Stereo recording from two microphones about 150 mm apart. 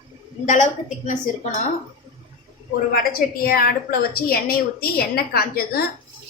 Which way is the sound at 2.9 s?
80° left.